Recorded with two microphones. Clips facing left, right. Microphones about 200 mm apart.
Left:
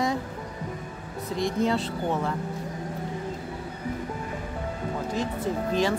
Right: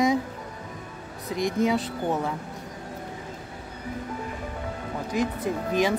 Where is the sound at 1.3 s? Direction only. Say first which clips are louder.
Right 1 dB; 15° right (ahead or behind).